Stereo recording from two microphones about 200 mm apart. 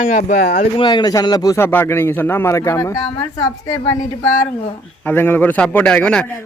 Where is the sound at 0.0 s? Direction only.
40° left (ahead or behind).